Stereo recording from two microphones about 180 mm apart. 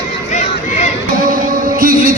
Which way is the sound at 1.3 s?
50° right (ahead or behind).